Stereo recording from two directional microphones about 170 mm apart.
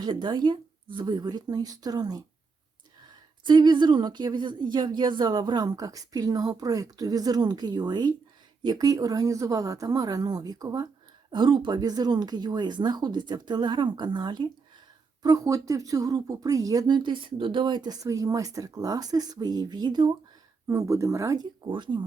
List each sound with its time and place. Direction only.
0.0 s speech: 25° right (ahead or behind)
3.4 s speech: 25° right (ahead or behind)